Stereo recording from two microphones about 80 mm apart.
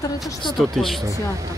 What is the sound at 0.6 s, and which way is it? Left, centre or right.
Speech, centre.